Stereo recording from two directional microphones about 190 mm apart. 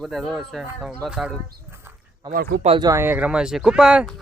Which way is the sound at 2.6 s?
30° right (ahead or behind).